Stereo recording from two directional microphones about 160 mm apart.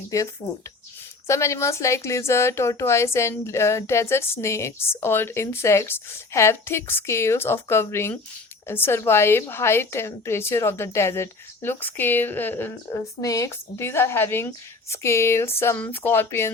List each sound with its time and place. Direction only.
1.3 s a woman's voice: 20° left (ahead or behind)